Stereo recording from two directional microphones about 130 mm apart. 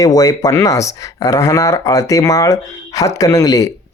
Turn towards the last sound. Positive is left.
turn(degrees=25)  # may be behind; listen again after turning